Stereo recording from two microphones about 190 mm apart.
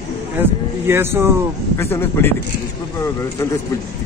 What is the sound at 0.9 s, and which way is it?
Speech, 10° right (ahead or behind).